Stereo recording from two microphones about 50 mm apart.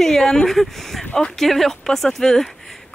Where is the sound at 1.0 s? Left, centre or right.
Centre.